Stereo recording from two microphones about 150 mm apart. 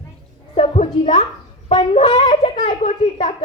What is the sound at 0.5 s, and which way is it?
Speech, 50° left (ahead or behind).